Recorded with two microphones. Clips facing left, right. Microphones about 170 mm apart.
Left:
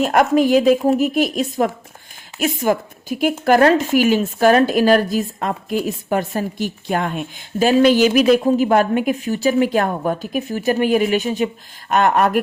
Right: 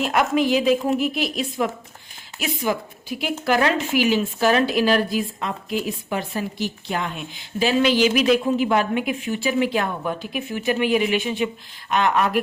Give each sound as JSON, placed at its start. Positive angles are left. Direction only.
{"t": 0.0, "sound": "a woman's voice", "side_deg": 45}